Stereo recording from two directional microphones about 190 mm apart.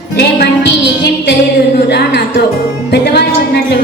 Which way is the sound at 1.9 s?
60° left (ahead or behind).